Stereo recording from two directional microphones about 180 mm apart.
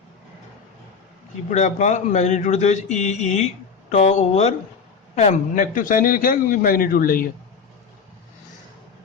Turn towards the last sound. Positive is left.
turn(degrees=55)  # may be behind; listen again after turning